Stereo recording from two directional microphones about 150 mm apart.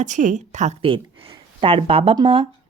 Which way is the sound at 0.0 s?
55° right (ahead or behind).